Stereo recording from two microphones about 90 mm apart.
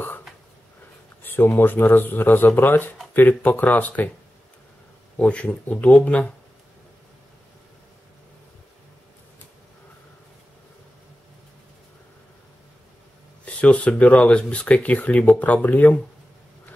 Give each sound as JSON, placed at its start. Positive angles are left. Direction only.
{"t": 1.2, "sound": "speech", "side_deg": 25}
{"t": 5.2, "sound": "speech", "side_deg": 15}
{"t": 13.5, "sound": "speech", "side_deg": 15}